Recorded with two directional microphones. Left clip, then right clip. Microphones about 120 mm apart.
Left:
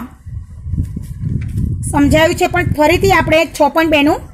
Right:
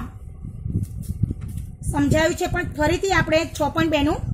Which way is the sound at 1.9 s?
25° left (ahead or behind).